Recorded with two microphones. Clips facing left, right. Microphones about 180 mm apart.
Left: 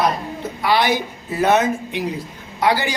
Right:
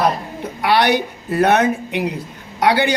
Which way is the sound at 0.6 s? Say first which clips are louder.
Right 3 dB; 65° right (ahead or behind).